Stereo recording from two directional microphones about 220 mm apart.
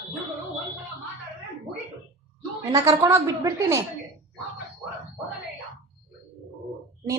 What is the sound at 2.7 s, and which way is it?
A woman's voice, 15° right (ahead or behind).